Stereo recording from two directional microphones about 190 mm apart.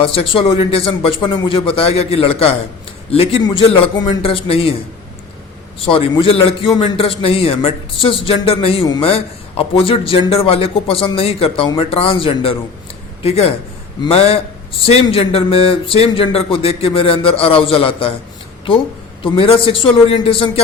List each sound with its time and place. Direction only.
0.0 s speech: 30° left (ahead or behind)
5.8 s speech: 30° left (ahead or behind)
14.0 s a man's voice: 30° left (ahead or behind)
19.2 s speech: 30° left (ahead or behind)